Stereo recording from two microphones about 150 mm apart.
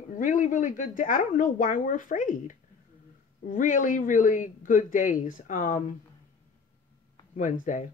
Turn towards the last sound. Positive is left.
turn(degrees=55)  # may be behind; listen again after turning